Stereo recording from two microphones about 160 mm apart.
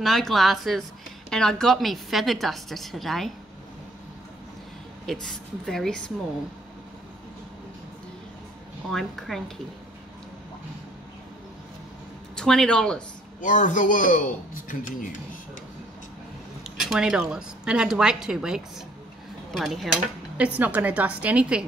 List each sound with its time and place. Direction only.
0.0 s a woman's voice: centre (ahead or behind)
5.0 s a woman's voice: 5° left (ahead or behind)
8.9 s a woman's voice: centre (ahead or behind)
12.4 s a woman's voice: 5° left (ahead or behind)
13.4 s a man's voice: 55° left (ahead or behind)
16.6 s a woman's voice: 5° right (ahead or behind)
19.5 s dishes: centre (ahead or behind)